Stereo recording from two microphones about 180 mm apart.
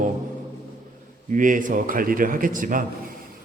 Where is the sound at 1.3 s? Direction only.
45° right (ahead or behind).